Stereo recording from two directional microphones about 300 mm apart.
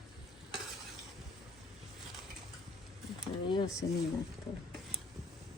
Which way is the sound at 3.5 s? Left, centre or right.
Centre.